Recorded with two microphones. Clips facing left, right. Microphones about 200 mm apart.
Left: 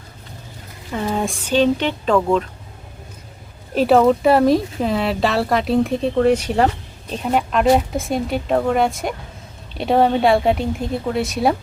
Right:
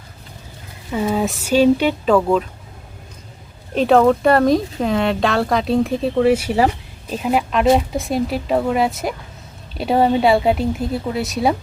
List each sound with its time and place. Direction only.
0.9 s speech: 5° right (ahead or behind)
3.8 s speech: 5° left (ahead or behind)